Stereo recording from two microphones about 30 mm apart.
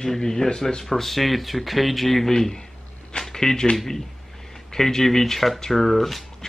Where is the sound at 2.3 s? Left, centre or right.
Centre.